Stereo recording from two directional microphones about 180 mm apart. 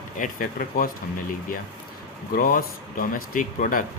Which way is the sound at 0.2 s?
50° left (ahead or behind).